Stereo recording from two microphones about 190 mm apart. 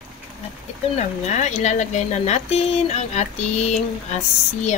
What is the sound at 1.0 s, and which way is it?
Speech, 35° left (ahead or behind).